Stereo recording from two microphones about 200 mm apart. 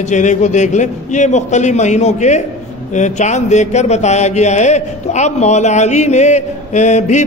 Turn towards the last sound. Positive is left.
turn(degrees=35)  # may be behind; listen again after turning